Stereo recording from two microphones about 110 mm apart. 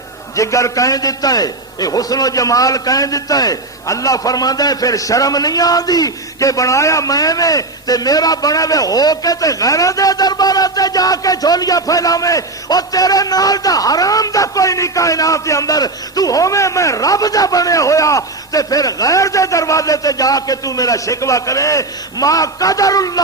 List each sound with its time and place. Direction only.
0.3 s a man's voice: 30° left (ahead or behind)